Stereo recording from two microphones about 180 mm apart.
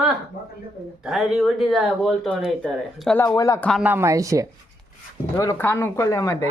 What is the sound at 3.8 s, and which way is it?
Speech, 15° right (ahead or behind).